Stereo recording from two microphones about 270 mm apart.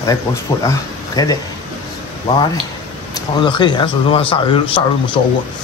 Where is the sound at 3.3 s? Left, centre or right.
Centre.